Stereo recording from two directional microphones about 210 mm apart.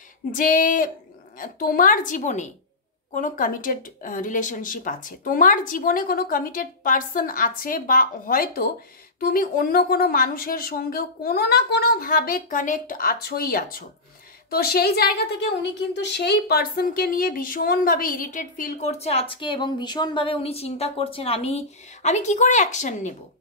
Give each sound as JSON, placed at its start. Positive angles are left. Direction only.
{"t": 0.3, "sound": "a woman's voice", "side_deg": 40}